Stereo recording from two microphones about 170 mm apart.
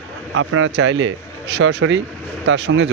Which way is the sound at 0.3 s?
90° right.